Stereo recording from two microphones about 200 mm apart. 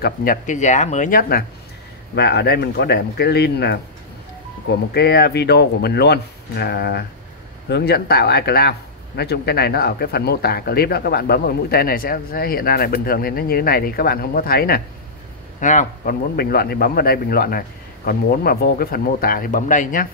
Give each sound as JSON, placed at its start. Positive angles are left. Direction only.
{"t": 0.0, "sound": "speech", "side_deg": 45}
{"t": 2.1, "sound": "speech", "side_deg": 55}
{"t": 4.9, "sound": "speech", "side_deg": 55}
{"t": 15.6, "sound": "speech", "side_deg": 40}